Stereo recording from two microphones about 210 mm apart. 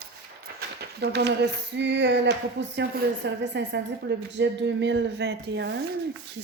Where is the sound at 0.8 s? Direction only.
50° right (ahead or behind).